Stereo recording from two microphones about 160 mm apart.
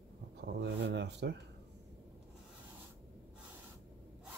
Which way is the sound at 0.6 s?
90° right.